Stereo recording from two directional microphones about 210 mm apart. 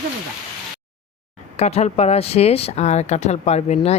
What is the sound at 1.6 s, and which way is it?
Speech, 30° left (ahead or behind).